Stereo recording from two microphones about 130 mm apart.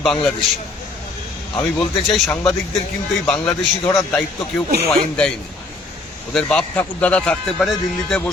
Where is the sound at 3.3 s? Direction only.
20° left (ahead or behind).